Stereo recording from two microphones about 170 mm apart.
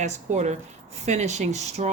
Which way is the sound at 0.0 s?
45° right (ahead or behind).